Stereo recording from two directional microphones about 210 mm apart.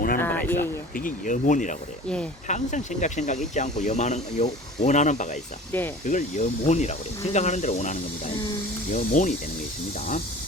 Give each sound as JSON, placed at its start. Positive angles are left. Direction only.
{"t": 0.2, "sound": "a sound", "side_deg": 10}
{"t": 0.9, "sound": "speech", "side_deg": 40}
{"t": 5.7, "sound": "speech", "side_deg": 10}
{"t": 6.1, "sound": "speech", "side_deg": 35}